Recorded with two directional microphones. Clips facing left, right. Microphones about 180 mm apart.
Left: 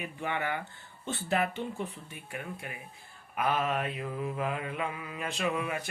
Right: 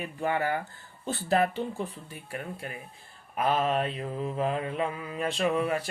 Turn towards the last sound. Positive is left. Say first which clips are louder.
# right 5 dB
turn(degrees=-35)  # may be behind; listen again after turning